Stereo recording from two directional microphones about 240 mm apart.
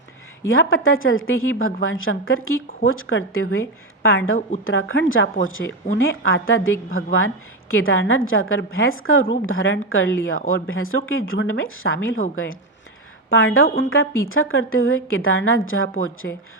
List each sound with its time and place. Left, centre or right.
0.4 s a woman's voice: left
13.3 s a woman's voice: left